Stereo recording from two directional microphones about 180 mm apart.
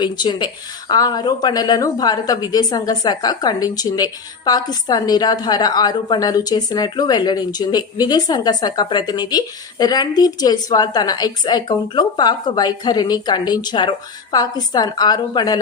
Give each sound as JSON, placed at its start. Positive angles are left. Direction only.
{"t": 0.0, "sound": "a woman's voice", "side_deg": 25}